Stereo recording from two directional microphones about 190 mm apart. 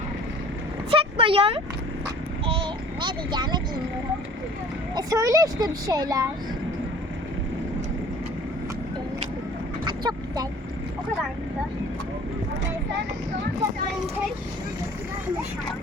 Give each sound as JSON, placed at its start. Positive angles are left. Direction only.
{"t": 0.9, "sound": "vehicle", "side_deg": -30}
{"t": 2.5, "sound": "a sound", "side_deg": -25}
{"t": 4.9, "sound": "speech", "side_deg": -20}
{"t": 9.8, "sound": "vehicle", "side_deg": -20}